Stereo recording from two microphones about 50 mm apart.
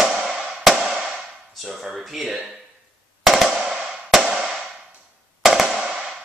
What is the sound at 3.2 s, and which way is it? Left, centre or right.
Music, centre.